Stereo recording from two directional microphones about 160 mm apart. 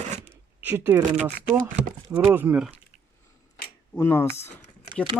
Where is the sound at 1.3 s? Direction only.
60° right (ahead or behind).